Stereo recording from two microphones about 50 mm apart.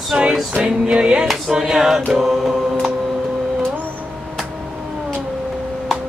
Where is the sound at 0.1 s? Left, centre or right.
Centre.